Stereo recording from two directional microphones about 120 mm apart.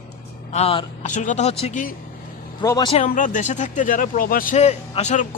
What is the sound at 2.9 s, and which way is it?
Speech, 85° left.